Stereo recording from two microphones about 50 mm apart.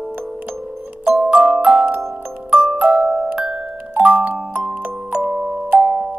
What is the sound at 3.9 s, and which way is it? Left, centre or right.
Music, right.